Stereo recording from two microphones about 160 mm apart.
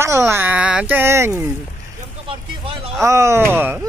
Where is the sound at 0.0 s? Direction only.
20° right (ahead or behind).